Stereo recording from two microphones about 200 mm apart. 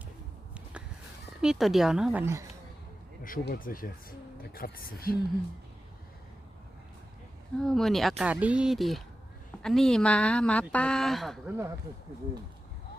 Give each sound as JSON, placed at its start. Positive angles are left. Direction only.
{"t": 1.4, "sound": "speech", "side_deg": 0}
{"t": 3.2, "sound": "speech", "side_deg": 45}
{"t": 7.6, "sound": "speech", "side_deg": 0}